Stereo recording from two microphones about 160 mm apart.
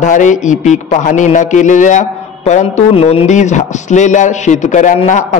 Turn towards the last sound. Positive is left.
turn(degrees=50)  # may be behind; listen again after turning